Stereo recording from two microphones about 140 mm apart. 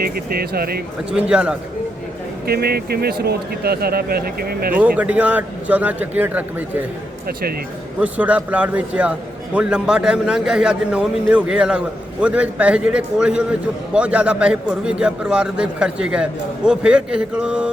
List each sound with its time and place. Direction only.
0.0 s speech: 90° right
1.1 s a man's voice: 5° right (ahead or behind)
2.5 s speech: 90° right
4.9 s a man's voice: 10° right (ahead or behind)
8.0 s a man's voice: 10° right (ahead or behind)